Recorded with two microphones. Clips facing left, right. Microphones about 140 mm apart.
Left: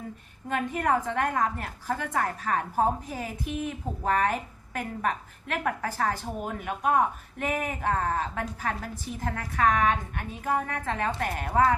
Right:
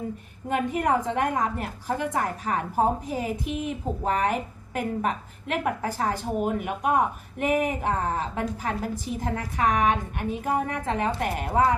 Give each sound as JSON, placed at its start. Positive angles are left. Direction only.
{"t": 0.4, "sound": "a woman's voice", "side_deg": -15}